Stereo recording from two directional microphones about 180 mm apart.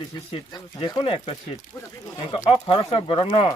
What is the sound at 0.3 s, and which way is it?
Speech, 30° left (ahead or behind).